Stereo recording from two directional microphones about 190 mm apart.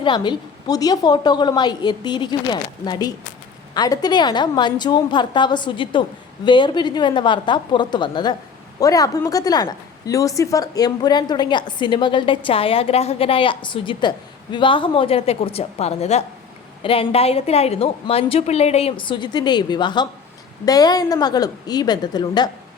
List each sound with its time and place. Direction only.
0.0 s a woman's voice: 25° left (ahead or behind)